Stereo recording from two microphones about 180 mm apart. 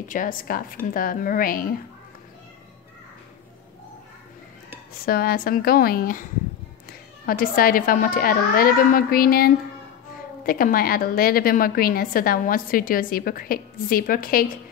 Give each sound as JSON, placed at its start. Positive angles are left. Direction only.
{"t": 0.1, "sound": "a woman's voice", "side_deg": 50}
{"t": 5.0, "sound": "a woman's voice", "side_deg": 55}